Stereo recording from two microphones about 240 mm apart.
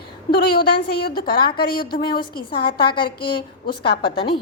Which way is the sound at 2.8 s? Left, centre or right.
Centre.